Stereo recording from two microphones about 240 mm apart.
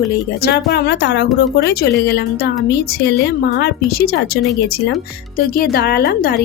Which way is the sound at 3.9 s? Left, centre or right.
Left.